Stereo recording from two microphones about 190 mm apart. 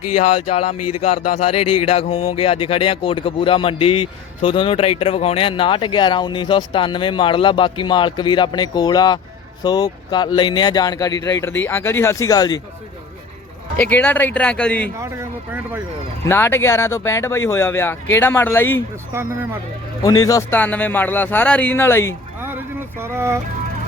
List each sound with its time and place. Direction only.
0.2 s speech: 30° left (ahead or behind)
13.7 s speech: 10° left (ahead or behind)
14.9 s speech: 15° right (ahead or behind)
16.3 s speech: 10° left (ahead or behind)
19.1 s speech: 10° right (ahead or behind)
20.1 s speech: 20° left (ahead or behind)
22.4 s speech: 10° right (ahead or behind)